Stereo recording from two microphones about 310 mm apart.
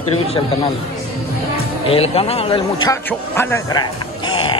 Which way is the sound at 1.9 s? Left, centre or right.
Centre.